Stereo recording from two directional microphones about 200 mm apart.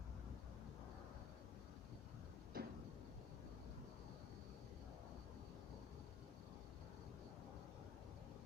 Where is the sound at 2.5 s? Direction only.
50° right (ahead or behind).